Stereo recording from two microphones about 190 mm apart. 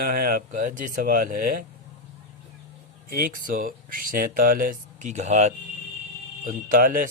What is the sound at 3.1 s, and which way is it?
Speech, 50° right (ahead or behind).